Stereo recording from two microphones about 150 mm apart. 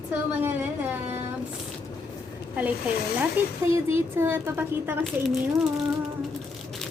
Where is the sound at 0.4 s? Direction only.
15° right (ahead or behind).